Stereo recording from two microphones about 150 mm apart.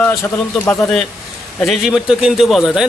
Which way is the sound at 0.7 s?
5° left (ahead or behind).